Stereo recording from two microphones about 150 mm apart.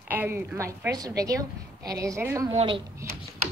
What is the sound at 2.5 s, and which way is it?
Speech, 45° right (ahead or behind).